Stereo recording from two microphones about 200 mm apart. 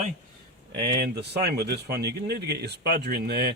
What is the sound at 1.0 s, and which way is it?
Speech, 55° right (ahead or behind).